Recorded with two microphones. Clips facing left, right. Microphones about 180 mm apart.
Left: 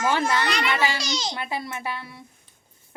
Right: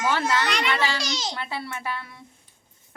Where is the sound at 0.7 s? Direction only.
15° left (ahead or behind).